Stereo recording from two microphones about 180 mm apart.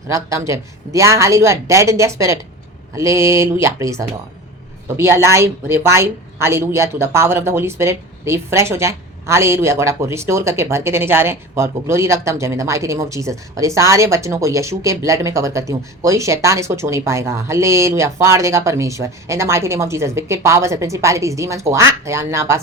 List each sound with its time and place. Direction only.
0.1 s a woman's voice: 15° right (ahead or behind)